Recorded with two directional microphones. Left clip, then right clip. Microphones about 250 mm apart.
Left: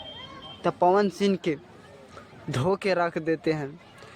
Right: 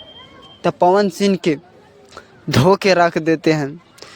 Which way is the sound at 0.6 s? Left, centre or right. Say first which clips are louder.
Right 8 dB; right.